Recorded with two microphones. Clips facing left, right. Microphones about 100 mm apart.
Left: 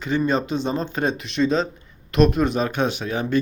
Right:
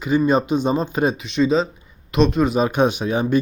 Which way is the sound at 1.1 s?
Centre (ahead or behind).